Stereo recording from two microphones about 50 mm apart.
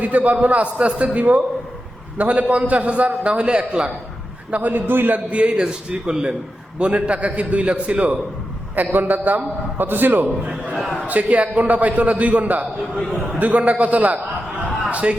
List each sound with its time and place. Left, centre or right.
0.0 s a man's voice: right
4.5 s a man's voice: right
5.3 s a man's voice: right
14.8 s a sound: right